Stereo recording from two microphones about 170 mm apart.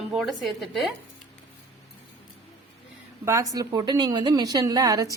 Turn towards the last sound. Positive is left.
turn(degrees=-20)  # may be behind; listen again after turning